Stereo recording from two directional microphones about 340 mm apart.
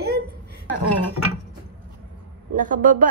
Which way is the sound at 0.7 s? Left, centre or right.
Right.